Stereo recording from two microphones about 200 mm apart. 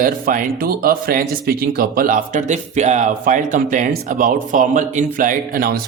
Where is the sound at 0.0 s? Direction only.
45° right (ahead or behind).